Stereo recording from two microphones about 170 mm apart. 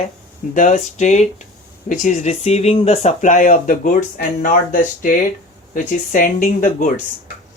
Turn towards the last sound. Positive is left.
turn(degrees=50)  # may be behind; listen again after turning